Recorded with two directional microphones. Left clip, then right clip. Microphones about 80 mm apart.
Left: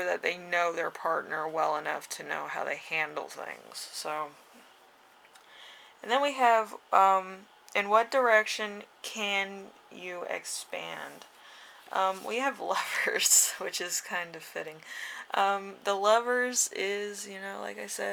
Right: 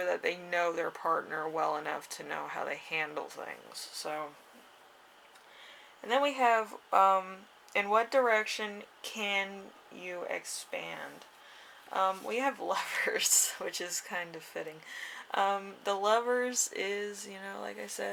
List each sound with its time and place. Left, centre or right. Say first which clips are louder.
0.0 s speech: left 2 dB; left
6.0 s speech: left 2 dB; left